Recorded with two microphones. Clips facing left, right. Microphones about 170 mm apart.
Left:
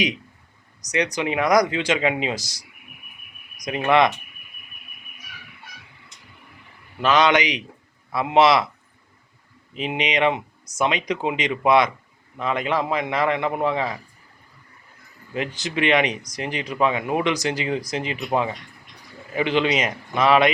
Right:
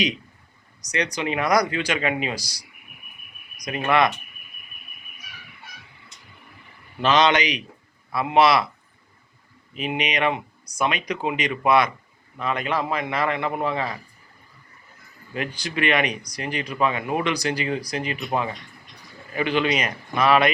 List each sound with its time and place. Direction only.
0.9 s speech: 20° left (ahead or behind)
3.8 s speech: 20° left (ahead or behind)
7.0 s speech: 10° left (ahead or behind)
9.7 s speech: 20° left (ahead or behind)
15.4 s speech: 20° left (ahead or behind)
19.3 s speech: 20° left (ahead or behind)